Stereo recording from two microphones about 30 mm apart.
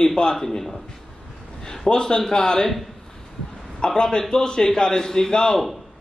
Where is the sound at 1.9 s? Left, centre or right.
Left.